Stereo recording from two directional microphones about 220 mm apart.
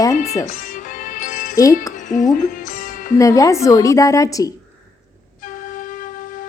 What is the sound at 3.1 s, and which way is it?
A woman's voice, 15° left (ahead or behind).